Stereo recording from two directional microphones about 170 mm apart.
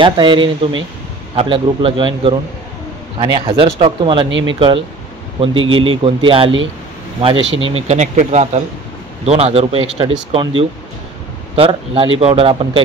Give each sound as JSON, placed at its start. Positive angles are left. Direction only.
{"t": 0.0, "sound": "speech", "side_deg": -30}
{"t": 4.3, "sound": "speech", "side_deg": -90}
{"t": 4.6, "sound": "speech", "side_deg": -30}